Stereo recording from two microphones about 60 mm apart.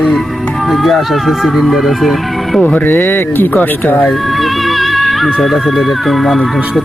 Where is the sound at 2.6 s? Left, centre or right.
Left.